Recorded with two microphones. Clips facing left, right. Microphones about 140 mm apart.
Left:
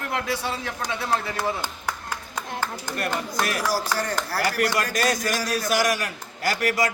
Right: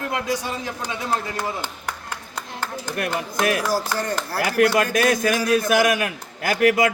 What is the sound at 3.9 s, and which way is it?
Speech, 20° right (ahead or behind).